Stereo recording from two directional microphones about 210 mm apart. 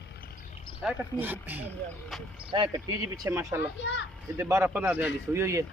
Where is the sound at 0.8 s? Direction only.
5° right (ahead or behind).